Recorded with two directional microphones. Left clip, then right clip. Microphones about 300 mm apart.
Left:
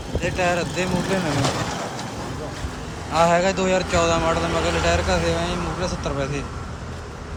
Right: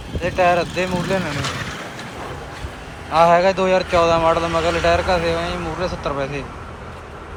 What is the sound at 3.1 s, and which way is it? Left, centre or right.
Speech, centre.